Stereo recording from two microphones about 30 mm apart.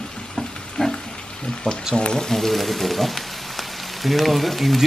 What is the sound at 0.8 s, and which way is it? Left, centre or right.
Pig, left.